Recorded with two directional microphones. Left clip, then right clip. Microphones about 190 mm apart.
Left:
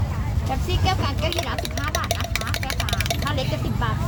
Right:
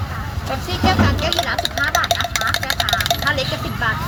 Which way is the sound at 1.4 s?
55° left (ahead or behind).